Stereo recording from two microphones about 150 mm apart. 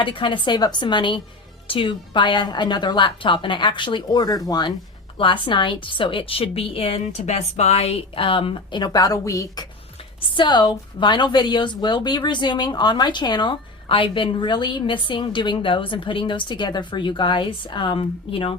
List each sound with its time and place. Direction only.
0.0 s a woman's voice: 35° left (ahead or behind)